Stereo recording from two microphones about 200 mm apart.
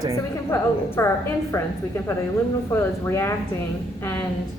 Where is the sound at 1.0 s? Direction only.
15° left (ahead or behind).